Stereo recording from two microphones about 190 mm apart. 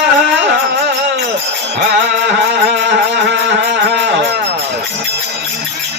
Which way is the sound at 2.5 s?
70° right (ahead or behind).